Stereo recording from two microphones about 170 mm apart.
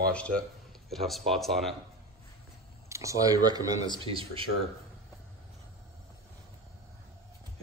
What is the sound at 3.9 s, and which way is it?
Speech, 30° right (ahead or behind).